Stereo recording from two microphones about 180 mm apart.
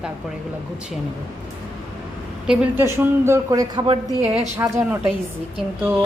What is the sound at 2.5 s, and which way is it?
A woman's voice, 10° right (ahead or behind).